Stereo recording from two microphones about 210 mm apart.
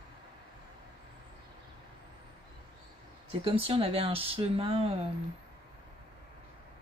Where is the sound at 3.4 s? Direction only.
25° right (ahead or behind).